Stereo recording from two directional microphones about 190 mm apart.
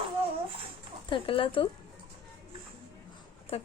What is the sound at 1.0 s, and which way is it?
Speech, 25° left (ahead or behind).